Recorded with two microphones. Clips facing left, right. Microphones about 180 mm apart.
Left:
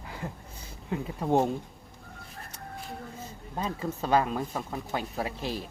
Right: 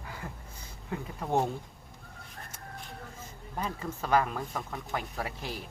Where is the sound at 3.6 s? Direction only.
25° left (ahead or behind).